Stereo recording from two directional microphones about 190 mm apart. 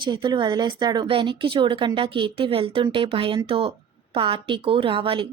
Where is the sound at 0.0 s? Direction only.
25° right (ahead or behind).